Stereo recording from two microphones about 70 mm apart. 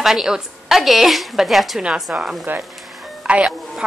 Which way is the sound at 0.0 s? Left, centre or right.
Centre.